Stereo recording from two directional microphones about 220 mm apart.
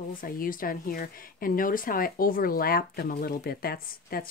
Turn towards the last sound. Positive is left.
turn(degrees=45)  # may be behind; listen again after turning